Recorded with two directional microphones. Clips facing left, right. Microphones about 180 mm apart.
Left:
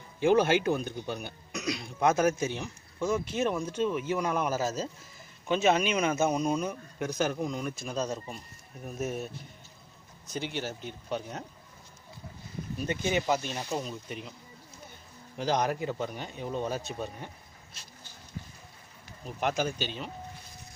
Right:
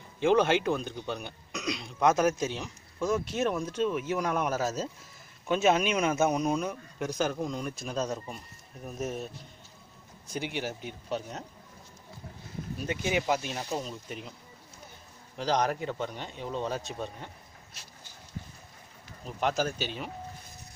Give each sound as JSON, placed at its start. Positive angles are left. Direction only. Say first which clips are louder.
{"t": 0.2, "sound": "speech", "louder": "even", "side_deg": 5}
{"t": 10.2, "sound": "speech", "louder": "right 1 dB", "side_deg": -10}
{"t": 12.8, "sound": "speech", "louder": "even", "side_deg": -5}
{"t": 15.3, "sound": "speech", "louder": "even", "side_deg": 5}
{"t": 19.2, "sound": "speech", "louder": "right 1 dB", "side_deg": 0}